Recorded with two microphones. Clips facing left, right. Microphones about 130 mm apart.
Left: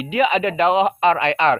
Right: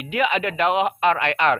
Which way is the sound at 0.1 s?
Centre (ahead or behind).